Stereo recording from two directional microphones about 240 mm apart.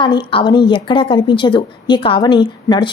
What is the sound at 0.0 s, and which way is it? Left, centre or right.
A woman's voice, centre.